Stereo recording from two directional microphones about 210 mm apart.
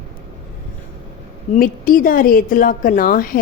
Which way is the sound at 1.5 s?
40° left (ahead or behind).